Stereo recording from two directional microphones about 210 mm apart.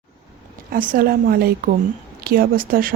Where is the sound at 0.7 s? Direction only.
45° right (ahead or behind).